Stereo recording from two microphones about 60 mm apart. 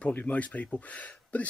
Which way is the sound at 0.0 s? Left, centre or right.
Left.